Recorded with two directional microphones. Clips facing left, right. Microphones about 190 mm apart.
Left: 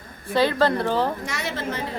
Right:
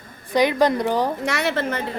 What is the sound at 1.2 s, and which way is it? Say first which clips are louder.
Speech: right 6 dB; 70° right (ahead or behind).